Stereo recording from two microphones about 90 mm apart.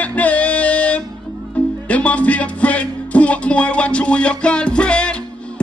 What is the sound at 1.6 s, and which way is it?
Music, 15° left (ahead or behind).